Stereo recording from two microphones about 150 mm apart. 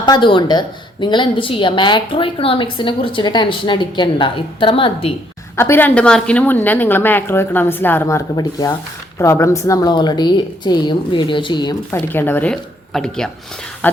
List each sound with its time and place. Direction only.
0.0 s a woman's voice: 30° left (ahead or behind)
5.5 s a woman's voice: 15° left (ahead or behind)
11.9 s a woman's voice: 15° left (ahead or behind)